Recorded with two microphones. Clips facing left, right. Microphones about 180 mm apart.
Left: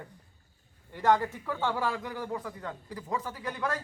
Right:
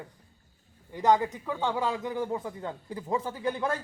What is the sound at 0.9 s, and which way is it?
A man's voice, 15° right (ahead or behind).